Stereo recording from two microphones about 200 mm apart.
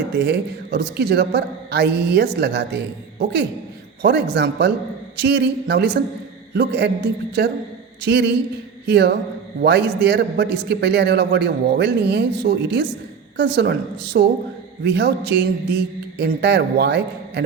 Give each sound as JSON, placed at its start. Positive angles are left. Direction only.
{"t": 0.2, "sound": "a man's voice", "side_deg": -55}